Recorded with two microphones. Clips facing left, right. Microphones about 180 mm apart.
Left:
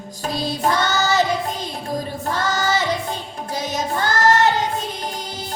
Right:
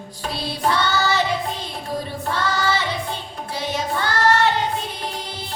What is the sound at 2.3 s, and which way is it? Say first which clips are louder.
Music: left 1 dB; 40° left (ahead or behind).